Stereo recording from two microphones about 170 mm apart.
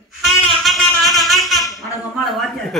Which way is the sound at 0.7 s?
Centre (ahead or behind).